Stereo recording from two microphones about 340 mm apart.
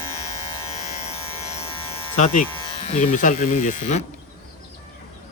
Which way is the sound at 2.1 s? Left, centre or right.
Centre.